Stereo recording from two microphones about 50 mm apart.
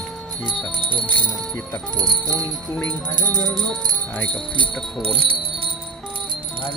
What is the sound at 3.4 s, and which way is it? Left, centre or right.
Speech, left.